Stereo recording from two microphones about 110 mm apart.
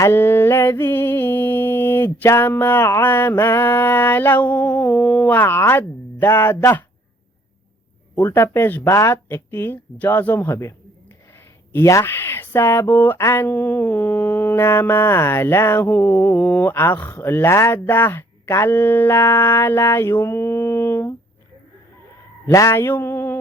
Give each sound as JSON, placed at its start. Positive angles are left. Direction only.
{"t": 0.0, "sound": "speech", "side_deg": 20}
{"t": 8.1, "sound": "speech", "side_deg": 15}
{"t": 22.5, "sound": "speech", "side_deg": 25}